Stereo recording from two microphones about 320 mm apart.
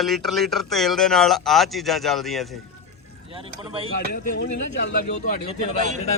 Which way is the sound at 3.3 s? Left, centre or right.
Centre.